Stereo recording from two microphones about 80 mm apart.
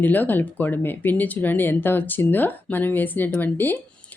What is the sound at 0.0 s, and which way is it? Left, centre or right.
A woman's voice, left.